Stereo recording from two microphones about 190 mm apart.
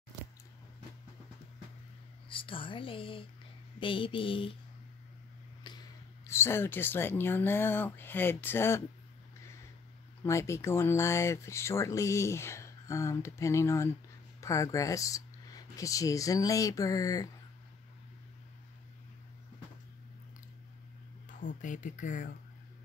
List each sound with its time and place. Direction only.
2.2 s speech: 25° left (ahead or behind)
5.6 s speech: 20° left (ahead or behind)
10.2 s speech: 15° left (ahead or behind)
21.3 s speech: 45° left (ahead or behind)